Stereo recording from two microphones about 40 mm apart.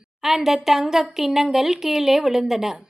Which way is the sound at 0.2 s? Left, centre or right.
Centre.